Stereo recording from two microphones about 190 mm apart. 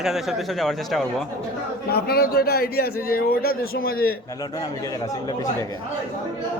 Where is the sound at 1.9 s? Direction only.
55° left (ahead or behind).